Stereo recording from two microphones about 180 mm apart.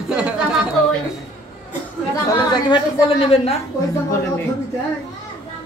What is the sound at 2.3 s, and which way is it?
Speech, 20° left (ahead or behind).